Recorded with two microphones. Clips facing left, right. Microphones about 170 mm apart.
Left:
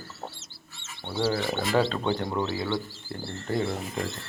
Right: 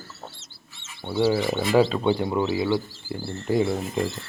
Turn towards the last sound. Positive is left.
turn(degrees=-10)  # may be behind; listen again after turning